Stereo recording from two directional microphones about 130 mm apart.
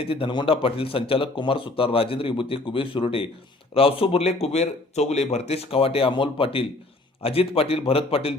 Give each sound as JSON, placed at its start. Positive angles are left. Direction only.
{"t": 0.0, "sound": "speech", "side_deg": 45}